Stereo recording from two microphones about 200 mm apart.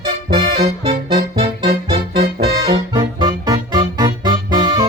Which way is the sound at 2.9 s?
20° right (ahead or behind).